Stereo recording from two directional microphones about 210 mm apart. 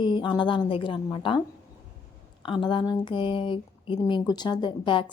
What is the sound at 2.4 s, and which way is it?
Speech, 20° left (ahead or behind).